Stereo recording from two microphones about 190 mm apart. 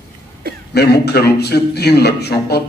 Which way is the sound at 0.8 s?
60° left (ahead or behind).